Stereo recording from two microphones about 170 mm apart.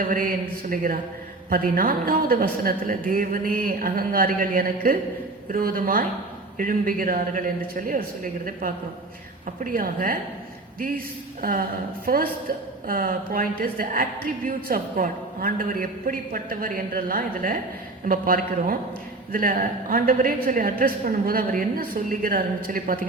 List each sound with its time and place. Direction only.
0.0 s a woman's voice: 55° right (ahead or behind)